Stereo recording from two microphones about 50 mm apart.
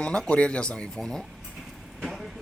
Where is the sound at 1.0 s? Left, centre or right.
Centre.